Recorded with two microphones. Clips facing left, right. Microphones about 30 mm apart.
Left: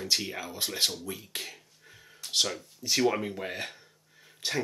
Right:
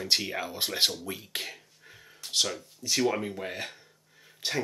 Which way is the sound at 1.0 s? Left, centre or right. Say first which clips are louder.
Right 2 dB; centre.